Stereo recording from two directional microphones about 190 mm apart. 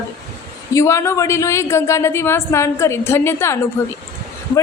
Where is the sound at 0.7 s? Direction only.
15° left (ahead or behind).